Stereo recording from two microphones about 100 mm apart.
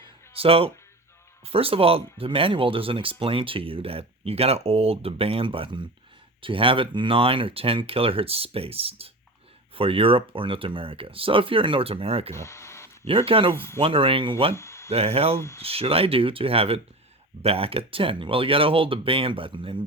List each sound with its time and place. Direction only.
0.0 s music: 70° right (ahead or behind)
1.5 s speech: 75° right (ahead or behind)
12.3 s speech: 30° left (ahead or behind)
13.1 s speech: 65° right (ahead or behind)
14.5 s a sound: 30° left (ahead or behind)
14.8 s speech: 80° right; by 19.8 s 55° right (ahead or behind)